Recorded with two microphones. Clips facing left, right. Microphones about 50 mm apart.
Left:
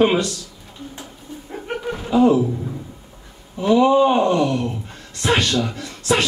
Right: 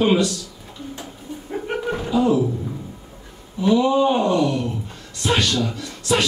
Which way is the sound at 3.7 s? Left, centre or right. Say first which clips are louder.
Left 4 dB; left.